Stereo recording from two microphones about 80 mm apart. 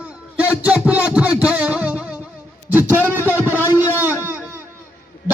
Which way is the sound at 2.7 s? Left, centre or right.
Right.